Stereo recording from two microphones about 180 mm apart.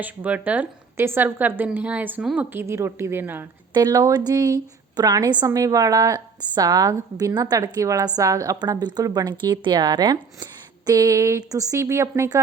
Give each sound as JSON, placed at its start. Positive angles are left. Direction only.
{"t": 0.0, "sound": "a woman's voice", "side_deg": -10}